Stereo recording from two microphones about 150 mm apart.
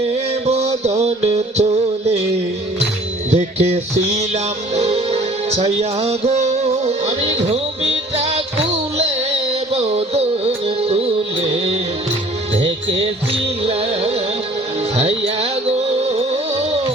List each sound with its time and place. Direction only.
0.1 s music: 45° right (ahead or behind)
3.3 s music: 45° right (ahead or behind)